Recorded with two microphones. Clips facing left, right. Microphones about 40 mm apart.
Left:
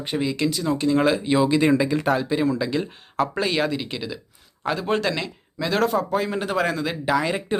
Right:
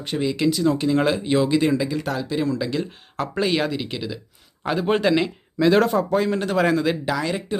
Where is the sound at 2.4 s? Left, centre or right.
Centre.